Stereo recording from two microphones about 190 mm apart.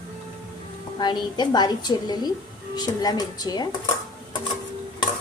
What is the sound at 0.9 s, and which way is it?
A woman's voice, 25° left (ahead or behind).